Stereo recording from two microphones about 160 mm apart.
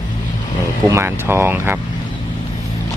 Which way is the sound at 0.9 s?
15° right (ahead or behind).